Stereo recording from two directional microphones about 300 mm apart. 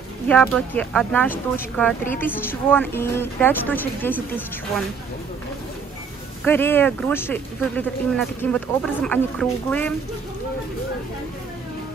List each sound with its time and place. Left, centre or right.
0.3 s a woman's voice: centre
6.4 s speech: centre